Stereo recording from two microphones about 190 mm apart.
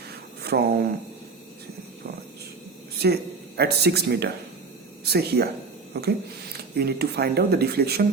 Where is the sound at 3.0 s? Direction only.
55° right (ahead or behind).